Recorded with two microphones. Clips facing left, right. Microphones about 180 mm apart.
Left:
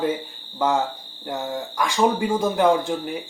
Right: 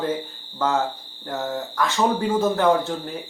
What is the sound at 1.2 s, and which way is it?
Speech, 10° left (ahead or behind).